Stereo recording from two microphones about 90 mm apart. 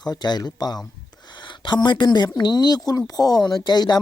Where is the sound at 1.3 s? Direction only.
60° left (ahead or behind).